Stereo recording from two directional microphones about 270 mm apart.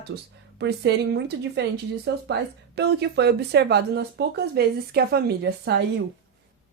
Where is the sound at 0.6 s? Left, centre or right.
Right.